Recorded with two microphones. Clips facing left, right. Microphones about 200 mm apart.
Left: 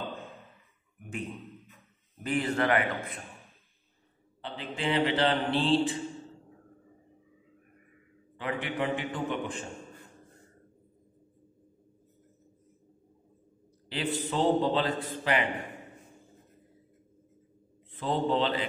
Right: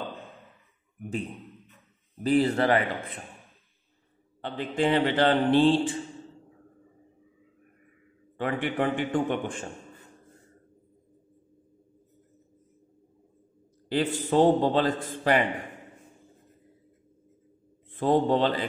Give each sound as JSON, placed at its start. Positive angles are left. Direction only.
{"t": 2.2, "sound": "speech", "side_deg": -35}
{"t": 4.4, "sound": "a man's voice", "side_deg": -45}
{"t": 8.4, "sound": "a man's voice", "side_deg": -50}
{"t": 13.8, "sound": "a man's voice", "side_deg": -45}
{"t": 17.9, "sound": "a man's voice", "side_deg": -45}